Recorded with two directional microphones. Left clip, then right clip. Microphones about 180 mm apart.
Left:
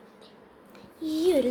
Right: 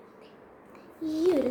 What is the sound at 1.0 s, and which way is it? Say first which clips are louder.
Speech: left 1 dB; 30° left (ahead or behind).